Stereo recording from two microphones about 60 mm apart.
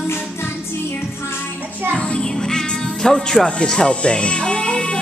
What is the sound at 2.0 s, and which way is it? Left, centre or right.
Music, centre.